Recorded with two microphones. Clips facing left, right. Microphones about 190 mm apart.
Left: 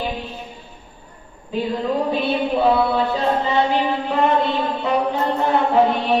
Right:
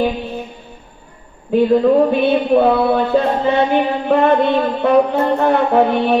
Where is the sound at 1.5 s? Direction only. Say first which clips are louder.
Right 10 dB; 60° right (ahead or behind).